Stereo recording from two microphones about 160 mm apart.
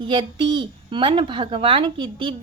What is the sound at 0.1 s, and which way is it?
A woman's voice, 30° right (ahead or behind).